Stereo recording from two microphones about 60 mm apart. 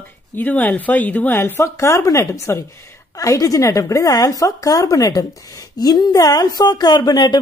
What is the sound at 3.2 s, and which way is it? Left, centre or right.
Speech, left.